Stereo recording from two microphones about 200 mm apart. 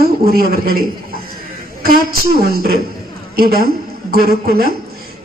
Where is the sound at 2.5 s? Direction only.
50° right (ahead or behind).